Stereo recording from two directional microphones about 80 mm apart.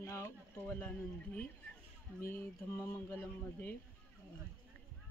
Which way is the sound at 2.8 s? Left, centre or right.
Centre.